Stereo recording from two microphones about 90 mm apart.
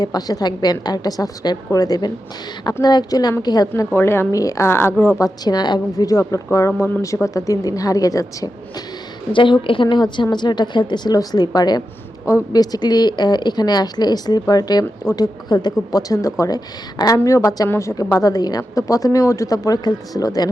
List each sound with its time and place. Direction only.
0.0 s a woman's voice: 45° left (ahead or behind)
3.9 s a woman's voice: 25° left (ahead or behind)
5.2 s a woman's voice: 50° left (ahead or behind); by 7.0 s 25° left (ahead or behind)
7.0 s a woman's voice: 35° left (ahead or behind)
9.3 s a woman's voice: 70° left (ahead or behind); by 20.5 s 40° left (ahead or behind)